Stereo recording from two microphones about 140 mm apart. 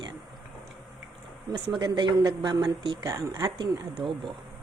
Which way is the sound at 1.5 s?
35° right (ahead or behind).